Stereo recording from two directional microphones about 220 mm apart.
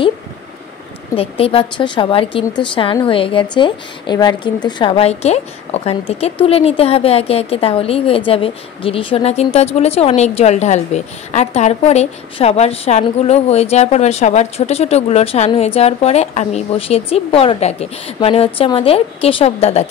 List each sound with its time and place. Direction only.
1.1 s a woman's voice: 25° left (ahead or behind)